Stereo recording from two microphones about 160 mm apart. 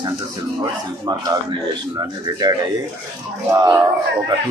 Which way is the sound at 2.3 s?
25° right (ahead or behind).